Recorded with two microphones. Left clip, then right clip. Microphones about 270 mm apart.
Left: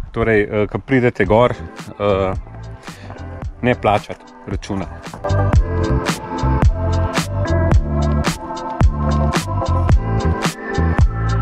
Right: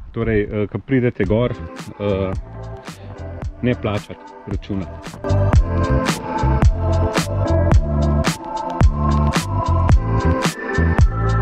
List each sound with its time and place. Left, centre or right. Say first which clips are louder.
0.4 s speech: left 4 dB; left
1.4 s speech: left 7 dB; centre
3.6 s speech: left 7 dB; centre
4.5 s music: left 3 dB; centre